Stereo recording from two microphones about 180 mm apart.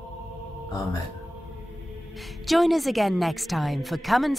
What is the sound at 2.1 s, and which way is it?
A woman's voice, centre (ahead or behind).